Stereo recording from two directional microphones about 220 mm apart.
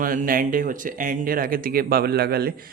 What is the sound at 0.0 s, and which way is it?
Speech, 40° right (ahead or behind).